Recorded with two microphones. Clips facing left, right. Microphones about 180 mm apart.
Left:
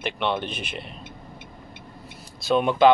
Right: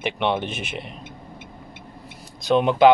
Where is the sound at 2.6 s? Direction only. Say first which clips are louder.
Right 2 dB; 15° right (ahead or behind).